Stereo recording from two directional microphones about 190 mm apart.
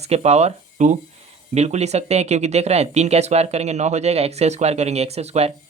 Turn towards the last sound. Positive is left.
turn(degrees=-35)  # may be behind; listen again after turning